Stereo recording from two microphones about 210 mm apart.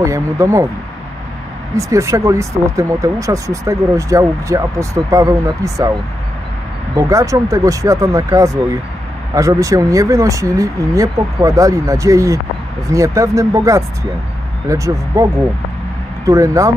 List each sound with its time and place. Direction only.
0.0 s speech: 15° right (ahead or behind)
1.8 s speech: 15° right (ahead or behind)
7.0 s speech: 15° right (ahead or behind)
16.3 s speech: 15° right (ahead or behind)